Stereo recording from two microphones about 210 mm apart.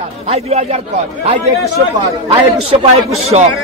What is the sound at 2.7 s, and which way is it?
Speech, 30° right (ahead or behind).